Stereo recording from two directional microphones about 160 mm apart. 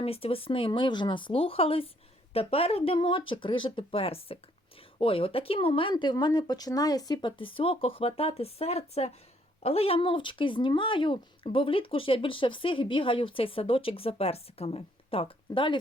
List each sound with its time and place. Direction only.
0.0 s speech: 35° left (ahead or behind)